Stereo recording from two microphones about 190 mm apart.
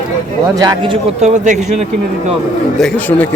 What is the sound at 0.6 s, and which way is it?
A man's voice, 25° right (ahead or behind).